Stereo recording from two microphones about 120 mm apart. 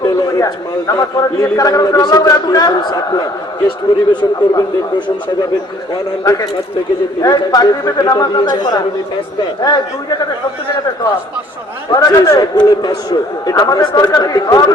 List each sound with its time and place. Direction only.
0.0 s a man's voice: 30° left (ahead or behind)
4.1 s a man's voice: 40° left (ahead or behind)
5.9 s a man's voice: 30° left (ahead or behind)
11.9 s a man's voice: 30° left (ahead or behind)